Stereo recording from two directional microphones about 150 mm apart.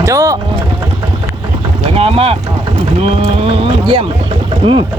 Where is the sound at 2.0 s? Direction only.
40° right (ahead or behind).